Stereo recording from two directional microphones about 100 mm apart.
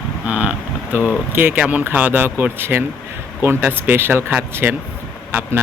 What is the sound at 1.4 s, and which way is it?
A man's voice, 15° right (ahead or behind).